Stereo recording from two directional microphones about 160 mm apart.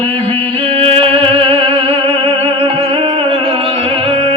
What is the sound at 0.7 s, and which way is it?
Music, 35° right (ahead or behind).